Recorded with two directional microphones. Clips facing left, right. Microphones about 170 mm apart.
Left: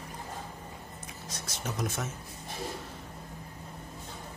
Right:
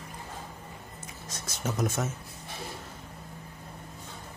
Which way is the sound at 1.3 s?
45° right (ahead or behind).